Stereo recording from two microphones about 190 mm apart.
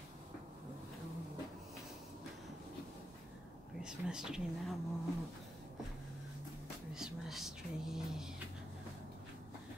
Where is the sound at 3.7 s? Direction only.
5° right (ahead or behind).